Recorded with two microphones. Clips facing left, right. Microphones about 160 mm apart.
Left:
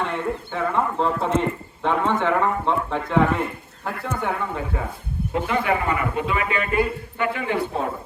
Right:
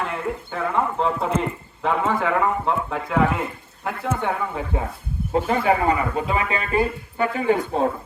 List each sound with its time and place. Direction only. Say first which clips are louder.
0.0 s speech: left 1 dB; 5° right (ahead or behind)
5.3 s a man's voice: right 3 dB; 35° right (ahead or behind)